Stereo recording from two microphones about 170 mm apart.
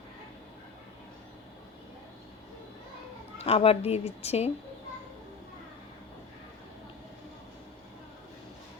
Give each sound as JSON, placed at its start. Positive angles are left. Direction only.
{"t": 3.4, "sound": "a woman's voice", "side_deg": 35}